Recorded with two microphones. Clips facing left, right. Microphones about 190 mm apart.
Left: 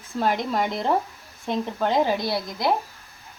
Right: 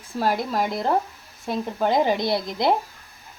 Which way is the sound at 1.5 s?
10° right (ahead or behind).